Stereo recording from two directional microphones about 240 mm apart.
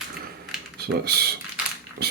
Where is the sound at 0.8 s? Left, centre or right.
Right.